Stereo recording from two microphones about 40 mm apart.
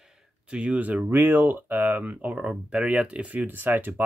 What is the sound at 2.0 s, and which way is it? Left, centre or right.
Speech, right.